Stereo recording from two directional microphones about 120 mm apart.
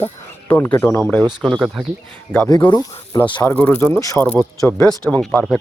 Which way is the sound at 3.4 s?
15° left (ahead or behind).